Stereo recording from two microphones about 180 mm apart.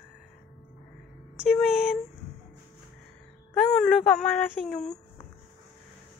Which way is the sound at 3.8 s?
5° left (ahead or behind).